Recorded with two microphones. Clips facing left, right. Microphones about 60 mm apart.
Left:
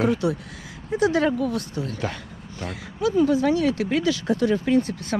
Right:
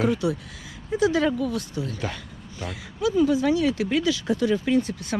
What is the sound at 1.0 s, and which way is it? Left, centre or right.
Speech, left.